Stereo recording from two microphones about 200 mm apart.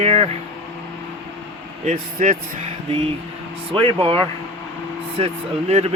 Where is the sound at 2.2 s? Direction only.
40° right (ahead or behind).